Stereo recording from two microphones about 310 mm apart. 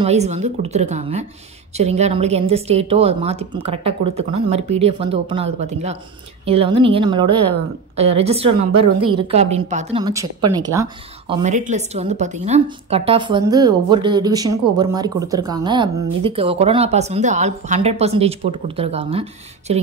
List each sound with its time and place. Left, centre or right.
0.0 s a woman's voice: right